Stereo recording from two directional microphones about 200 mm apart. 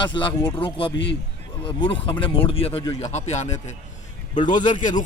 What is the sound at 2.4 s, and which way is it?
A man's voice, 30° left (ahead or behind).